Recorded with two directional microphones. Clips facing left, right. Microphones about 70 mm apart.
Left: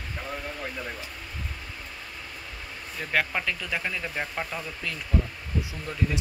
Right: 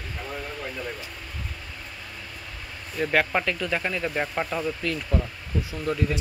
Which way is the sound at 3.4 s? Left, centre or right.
Centre.